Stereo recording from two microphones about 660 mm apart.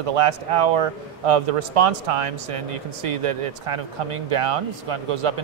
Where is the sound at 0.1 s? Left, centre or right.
Right.